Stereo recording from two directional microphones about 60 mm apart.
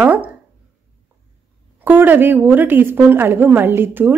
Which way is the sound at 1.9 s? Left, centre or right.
Right.